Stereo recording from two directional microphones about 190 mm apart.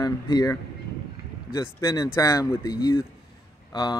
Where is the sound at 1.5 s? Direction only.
20° left (ahead or behind).